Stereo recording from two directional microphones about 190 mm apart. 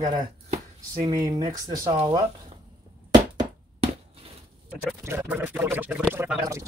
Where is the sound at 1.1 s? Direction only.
15° right (ahead or behind).